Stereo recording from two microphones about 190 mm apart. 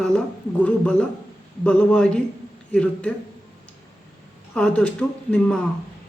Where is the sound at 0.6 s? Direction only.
5° left (ahead or behind).